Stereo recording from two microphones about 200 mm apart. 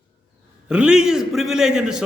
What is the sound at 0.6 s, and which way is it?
A man's voice, 5° right (ahead or behind).